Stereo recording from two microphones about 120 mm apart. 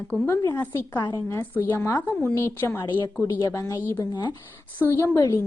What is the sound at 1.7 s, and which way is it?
A woman's voice, 20° left (ahead or behind).